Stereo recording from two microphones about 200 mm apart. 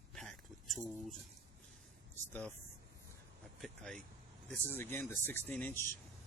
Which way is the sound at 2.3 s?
10° left (ahead or behind).